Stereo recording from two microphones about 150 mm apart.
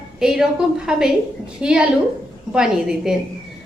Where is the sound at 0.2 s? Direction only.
5° right (ahead or behind).